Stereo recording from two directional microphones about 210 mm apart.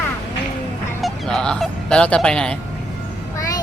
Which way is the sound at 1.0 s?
5° left (ahead or behind).